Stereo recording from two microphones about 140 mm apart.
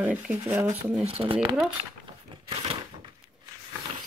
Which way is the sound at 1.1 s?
40° right (ahead or behind).